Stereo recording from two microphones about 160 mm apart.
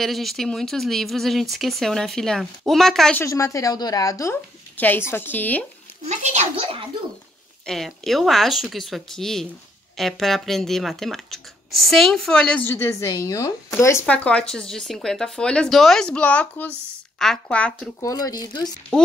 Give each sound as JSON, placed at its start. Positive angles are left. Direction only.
{"t": 0.0, "sound": "speech", "side_deg": 0}
{"t": 3.2, "sound": "a woman's voice", "side_deg": 20}
{"t": 6.0, "sound": "a child's voice", "side_deg": -45}
{"t": 7.6, "sound": "a woman's voice", "side_deg": 0}
{"t": 18.0, "sound": "speech", "side_deg": 25}